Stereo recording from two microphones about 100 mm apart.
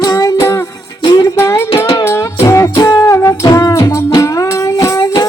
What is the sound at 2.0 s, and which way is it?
Music, 30° left (ahead or behind).